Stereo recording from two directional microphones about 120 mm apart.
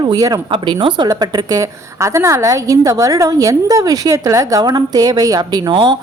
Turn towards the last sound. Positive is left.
turn(degrees=-40)  # may be behind; listen again after turning